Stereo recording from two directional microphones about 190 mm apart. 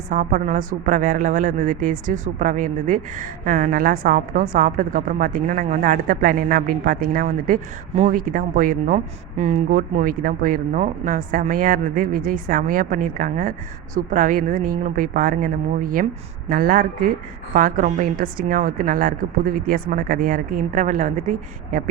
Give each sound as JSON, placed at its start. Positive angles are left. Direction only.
{"t": 0.1, "sound": "speech", "side_deg": -40}